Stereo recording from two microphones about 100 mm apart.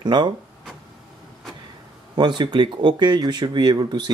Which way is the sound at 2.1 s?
50° right (ahead or behind).